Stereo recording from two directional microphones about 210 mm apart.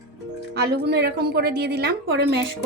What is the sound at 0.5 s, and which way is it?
Speech, 50° right (ahead or behind).